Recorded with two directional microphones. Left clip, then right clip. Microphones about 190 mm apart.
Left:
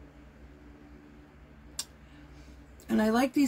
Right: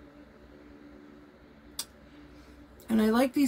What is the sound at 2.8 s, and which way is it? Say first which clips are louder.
Speech: right 1 dB; 15° right (ahead or behind).